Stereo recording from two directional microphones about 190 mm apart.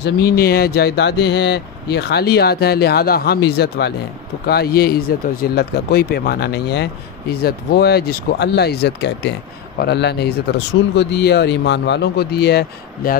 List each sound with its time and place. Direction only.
0.0 s speech: 55° left (ahead or behind)